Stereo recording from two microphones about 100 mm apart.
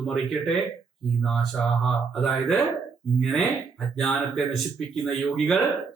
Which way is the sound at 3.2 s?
5° left (ahead or behind).